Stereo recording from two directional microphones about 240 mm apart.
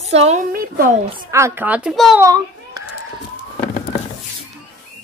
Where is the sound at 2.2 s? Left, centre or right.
Centre.